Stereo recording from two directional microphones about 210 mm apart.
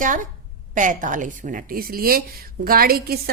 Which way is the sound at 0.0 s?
40° right (ahead or behind).